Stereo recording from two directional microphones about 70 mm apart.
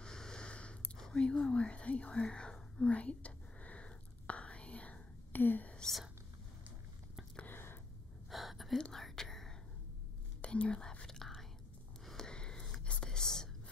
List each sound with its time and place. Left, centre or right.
0.0 s a sound: centre
1.0 s whispering: centre
5.8 s speech: centre
7.4 s whispering: left
8.3 s a sound: centre
8.7 s whispering: centre